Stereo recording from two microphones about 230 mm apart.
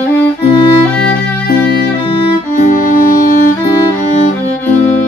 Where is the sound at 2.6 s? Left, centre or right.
Left.